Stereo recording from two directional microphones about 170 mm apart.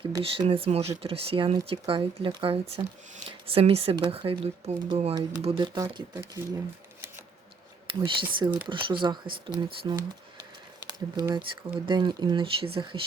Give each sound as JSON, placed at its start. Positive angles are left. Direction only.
{"t": 0.2, "sound": "speech", "side_deg": -35}
{"t": 5.7, "sound": "speech", "side_deg": -20}
{"t": 7.9, "sound": "speech", "side_deg": -30}